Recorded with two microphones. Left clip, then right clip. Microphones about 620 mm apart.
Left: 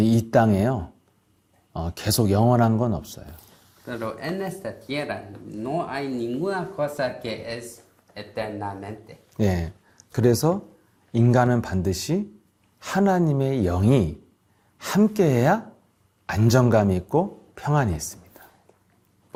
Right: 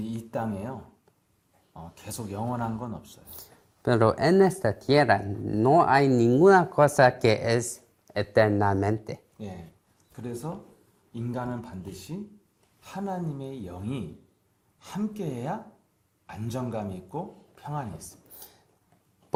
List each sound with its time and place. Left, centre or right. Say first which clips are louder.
0.0 s a man's voice: left 13 dB; left
3.8 s speech: right 8 dB; right
5.6 s speech: right 8 dB; right
8.1 s speech: right 9 dB; right
10.1 s a man's voice: left 16 dB; left